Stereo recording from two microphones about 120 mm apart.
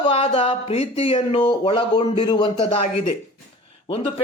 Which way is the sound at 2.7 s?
60° left (ahead or behind).